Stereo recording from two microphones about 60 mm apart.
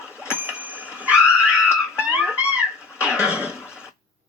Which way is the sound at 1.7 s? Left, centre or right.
Centre.